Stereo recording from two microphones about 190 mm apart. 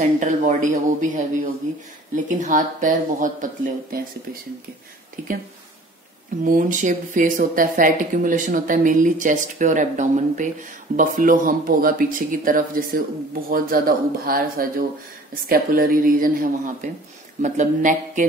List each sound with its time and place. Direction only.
0.2 s speech: 40° right (ahead or behind)
6.4 s speech: 45° right (ahead or behind)